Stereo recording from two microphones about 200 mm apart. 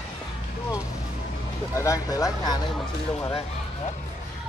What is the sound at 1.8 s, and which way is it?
Speech, 15° left (ahead or behind).